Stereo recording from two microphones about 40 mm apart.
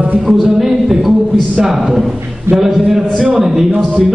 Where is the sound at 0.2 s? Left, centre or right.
Centre.